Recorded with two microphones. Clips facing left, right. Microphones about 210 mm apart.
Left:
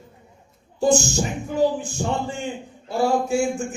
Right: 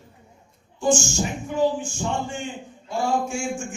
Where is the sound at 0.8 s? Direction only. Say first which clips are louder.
Left 3 dB; 35° left (ahead or behind).